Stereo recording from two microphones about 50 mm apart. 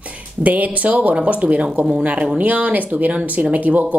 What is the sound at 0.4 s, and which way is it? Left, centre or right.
Speech, right.